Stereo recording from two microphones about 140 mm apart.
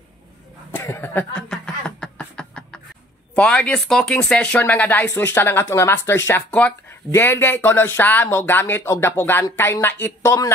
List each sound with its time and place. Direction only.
0.7 s speech: 15° left (ahead or behind)
1.5 s a sound: 5° left (ahead or behind)
3.3 s speech: 10° left (ahead or behind)